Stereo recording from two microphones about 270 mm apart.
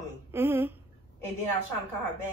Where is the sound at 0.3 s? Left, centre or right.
Centre.